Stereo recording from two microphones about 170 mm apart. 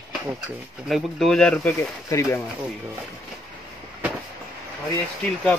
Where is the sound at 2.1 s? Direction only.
15° left (ahead or behind).